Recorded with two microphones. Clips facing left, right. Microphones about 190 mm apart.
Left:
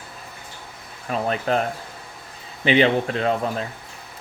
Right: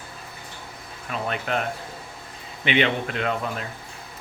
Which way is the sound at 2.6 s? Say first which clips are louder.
Left 5 dB; 35° left (ahead or behind).